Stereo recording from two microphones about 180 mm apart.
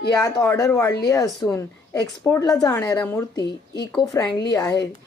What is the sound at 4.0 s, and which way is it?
Speech, 20° left (ahead or behind).